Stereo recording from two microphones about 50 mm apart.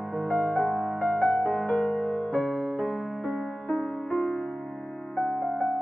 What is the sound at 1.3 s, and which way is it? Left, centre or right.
Music, left.